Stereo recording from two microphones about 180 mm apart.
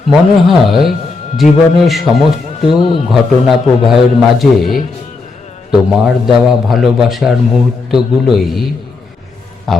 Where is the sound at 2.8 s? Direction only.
35° left (ahead or behind).